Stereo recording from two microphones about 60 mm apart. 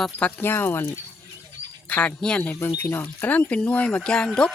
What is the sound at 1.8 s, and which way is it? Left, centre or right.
Speech, left.